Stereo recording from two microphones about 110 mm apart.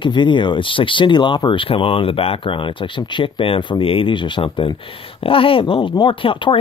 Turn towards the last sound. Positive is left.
turn(degrees=50)  # may be behind; listen again after turning